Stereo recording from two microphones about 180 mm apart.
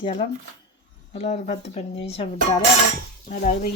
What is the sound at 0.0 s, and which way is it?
Speech, 30° left (ahead or behind).